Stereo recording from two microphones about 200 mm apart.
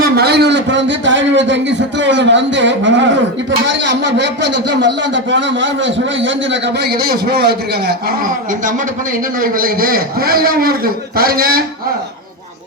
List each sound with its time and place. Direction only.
0.0 s a man's voice: 55° right (ahead or behind)
9.4 s a man's voice: 45° right (ahead or behind)